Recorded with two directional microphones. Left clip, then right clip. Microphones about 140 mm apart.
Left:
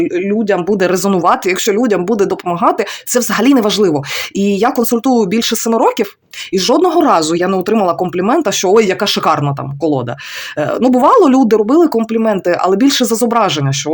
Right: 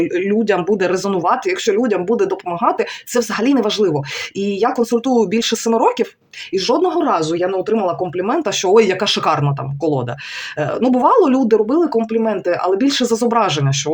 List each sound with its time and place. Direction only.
0.1 s speech: 20° left (ahead or behind)
0.7 s speech: 40° left (ahead or behind)
6.5 s speech: 55° left (ahead or behind); by 8.4 s 70° left (ahead or behind)
8.4 s speech: 40° left (ahead or behind)